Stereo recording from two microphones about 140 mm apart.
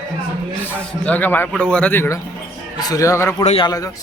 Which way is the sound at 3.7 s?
25° left (ahead or behind).